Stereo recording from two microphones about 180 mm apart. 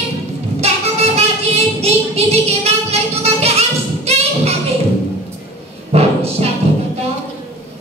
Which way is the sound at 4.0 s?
35° right (ahead or behind).